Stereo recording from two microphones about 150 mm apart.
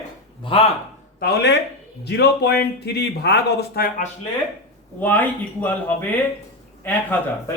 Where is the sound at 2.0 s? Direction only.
90° left; by 4.0 s 75° left (ahead or behind).